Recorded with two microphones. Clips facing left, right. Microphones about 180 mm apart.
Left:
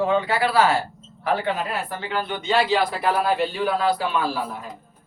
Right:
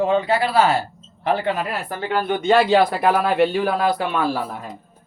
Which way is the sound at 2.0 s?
50° right (ahead or behind).